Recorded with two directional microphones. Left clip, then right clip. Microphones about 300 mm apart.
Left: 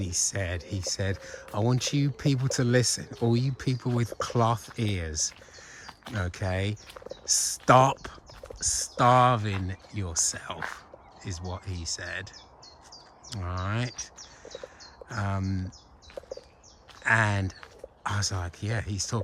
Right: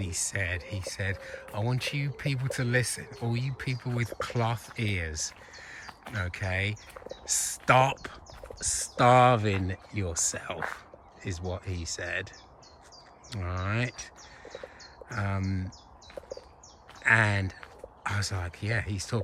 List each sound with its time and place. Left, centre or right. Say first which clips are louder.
0.0 s speech: left 2 dB; centre
13.3 s livestock: even; centre
15.1 s speech: left 1 dB; centre
17.0 s speech: right 1 dB; centre